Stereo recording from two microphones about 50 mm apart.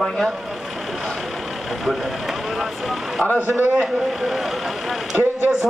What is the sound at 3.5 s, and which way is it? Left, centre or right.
Speech, right.